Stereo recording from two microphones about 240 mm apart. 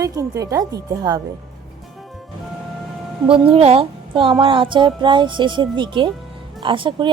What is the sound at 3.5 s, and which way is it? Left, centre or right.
Speech, right.